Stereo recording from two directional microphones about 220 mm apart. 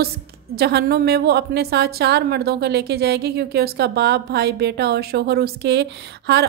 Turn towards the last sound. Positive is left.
turn(degrees=-50)  # may be behind; listen again after turning